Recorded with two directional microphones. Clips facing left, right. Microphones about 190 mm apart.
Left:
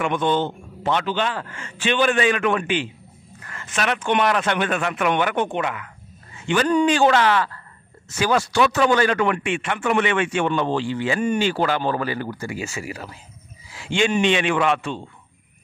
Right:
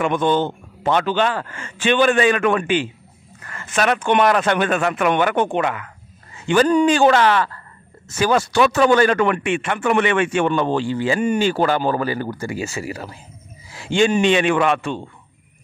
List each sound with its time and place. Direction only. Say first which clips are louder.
0.0 s speech: right 3 dB; 45° right (ahead or behind)